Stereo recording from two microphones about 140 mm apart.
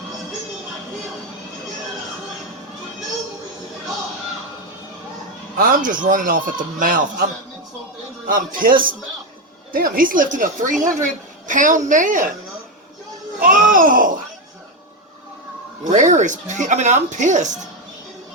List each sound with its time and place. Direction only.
5.5 s a woman's voice: 80° right
8.3 s a woman's voice: 85° right
13.4 s a woman's voice: 75° right (ahead or behind)
15.8 s speech: 65° right (ahead or behind)